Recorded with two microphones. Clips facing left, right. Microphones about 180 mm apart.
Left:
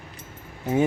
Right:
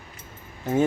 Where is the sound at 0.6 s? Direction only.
15° left (ahead or behind).